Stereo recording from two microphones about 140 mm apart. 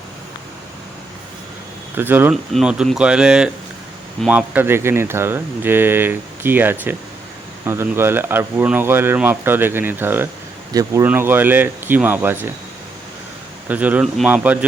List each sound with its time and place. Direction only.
2.0 s speech: 15° right (ahead or behind)
2.3 s speech: centre (ahead or behind)
13.7 s speech: 10° right (ahead or behind)